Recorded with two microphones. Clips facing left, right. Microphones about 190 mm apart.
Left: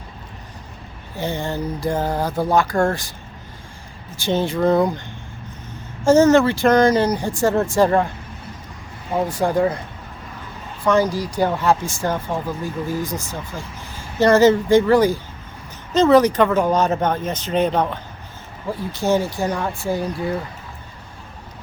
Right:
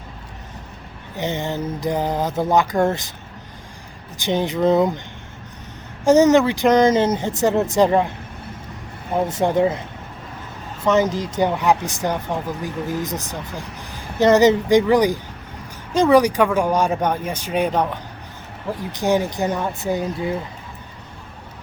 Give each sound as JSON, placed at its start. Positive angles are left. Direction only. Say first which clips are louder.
{"t": 1.1, "sound": "speech", "louder": "even", "side_deg": -20}
{"t": 4.2, "sound": "speech", "louder": "even", "side_deg": -15}
{"t": 6.1, "sound": "speech", "louder": "even", "side_deg": -15}
{"t": 9.2, "sound": "speech", "louder": "right 1 dB", "side_deg": -20}
{"t": 10.8, "sound": "speech", "louder": "even", "side_deg": -20}